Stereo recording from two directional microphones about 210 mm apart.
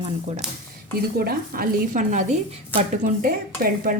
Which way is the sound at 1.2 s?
45° right (ahead or behind).